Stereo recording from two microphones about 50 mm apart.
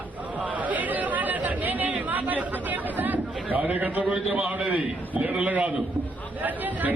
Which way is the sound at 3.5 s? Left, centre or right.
Right.